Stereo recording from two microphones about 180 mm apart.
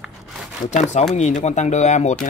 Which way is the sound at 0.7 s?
40° left (ahead or behind).